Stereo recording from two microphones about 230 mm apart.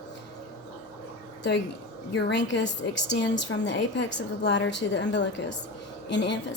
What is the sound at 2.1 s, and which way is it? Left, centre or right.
A woman's voice, left.